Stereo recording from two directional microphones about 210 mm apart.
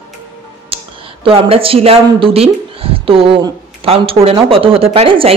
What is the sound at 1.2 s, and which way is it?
Speech, 30° right (ahead or behind).